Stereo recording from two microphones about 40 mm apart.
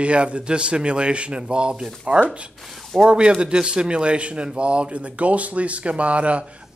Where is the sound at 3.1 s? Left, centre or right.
Right.